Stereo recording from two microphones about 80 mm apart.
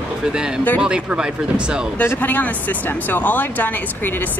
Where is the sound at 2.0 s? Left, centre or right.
Left.